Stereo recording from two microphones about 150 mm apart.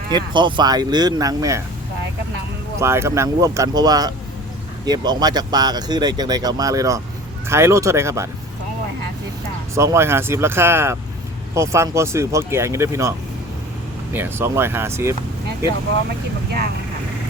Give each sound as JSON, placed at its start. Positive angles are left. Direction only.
{"t": 0.1, "sound": "speech", "side_deg": -30}
{"t": 2.7, "sound": "speech", "side_deg": -15}
{"t": 9.7, "sound": "speech", "side_deg": -20}